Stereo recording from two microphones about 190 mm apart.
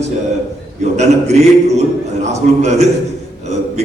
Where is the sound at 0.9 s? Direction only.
35° right (ahead or behind).